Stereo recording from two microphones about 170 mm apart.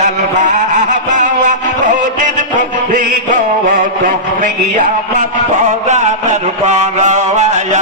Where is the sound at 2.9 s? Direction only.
50° right (ahead or behind).